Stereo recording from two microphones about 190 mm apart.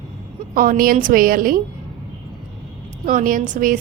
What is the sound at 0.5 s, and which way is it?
A woman's voice, 45° right (ahead or behind).